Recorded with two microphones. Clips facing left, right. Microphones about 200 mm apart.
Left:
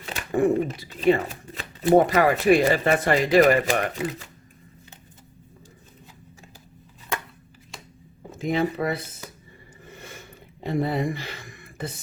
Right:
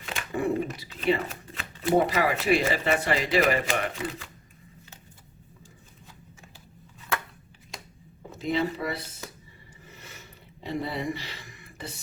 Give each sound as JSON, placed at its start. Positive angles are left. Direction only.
{"t": 0.0, "sound": "speech", "side_deg": 45}
{"t": 4.0, "sound": "speech", "side_deg": 25}
{"t": 8.3, "sound": "speech", "side_deg": 50}
{"t": 9.8, "sound": "a sound", "side_deg": 50}